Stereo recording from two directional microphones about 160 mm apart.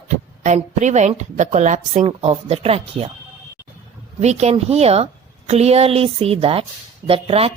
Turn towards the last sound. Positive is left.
turn(degrees=-40)  # may be behind; listen again after turning